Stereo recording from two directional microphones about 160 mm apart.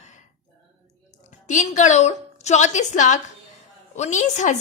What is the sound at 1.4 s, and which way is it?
A woman's voice, 50° left (ahead or behind).